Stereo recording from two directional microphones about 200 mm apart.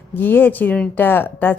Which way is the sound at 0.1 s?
10° left (ahead or behind).